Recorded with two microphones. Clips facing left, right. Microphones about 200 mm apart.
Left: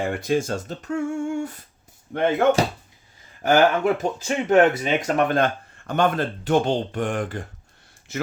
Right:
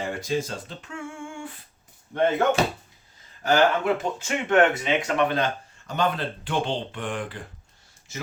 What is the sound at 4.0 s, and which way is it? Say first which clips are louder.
Speech: left 4 dB; 40° left (ahead or behind).